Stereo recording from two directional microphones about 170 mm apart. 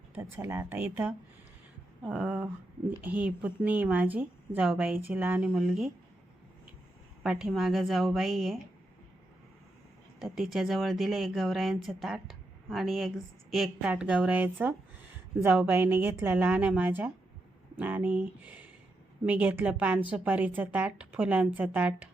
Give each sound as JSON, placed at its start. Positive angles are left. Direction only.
{"t": 0.2, "sound": "a woman's voice", "side_deg": -15}
{"t": 7.2, "sound": "speech", "side_deg": -5}
{"t": 10.2, "sound": "a woman's voice", "side_deg": 0}